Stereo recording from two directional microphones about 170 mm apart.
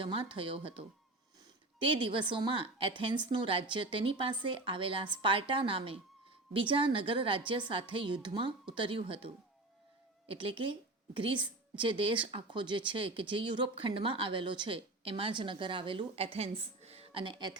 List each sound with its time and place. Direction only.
0.0 s a woman's voice: 30° right (ahead or behind)